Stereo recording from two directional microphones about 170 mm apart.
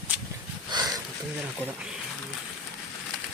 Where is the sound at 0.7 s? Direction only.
25° right (ahead or behind).